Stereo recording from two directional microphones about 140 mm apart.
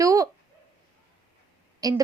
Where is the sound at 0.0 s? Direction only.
25° right (ahead or behind).